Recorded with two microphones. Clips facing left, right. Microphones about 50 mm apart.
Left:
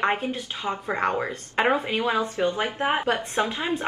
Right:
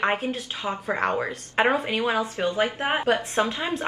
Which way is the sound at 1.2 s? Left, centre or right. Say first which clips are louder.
Right 1 dB; centre.